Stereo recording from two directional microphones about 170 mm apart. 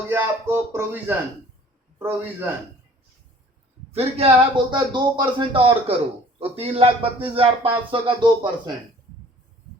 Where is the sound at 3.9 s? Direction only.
35° right (ahead or behind).